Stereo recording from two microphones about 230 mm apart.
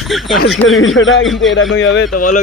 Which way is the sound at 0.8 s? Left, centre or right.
Left.